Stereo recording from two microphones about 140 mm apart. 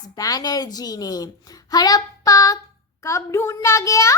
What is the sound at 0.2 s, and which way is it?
A child's voice, 25° left (ahead or behind).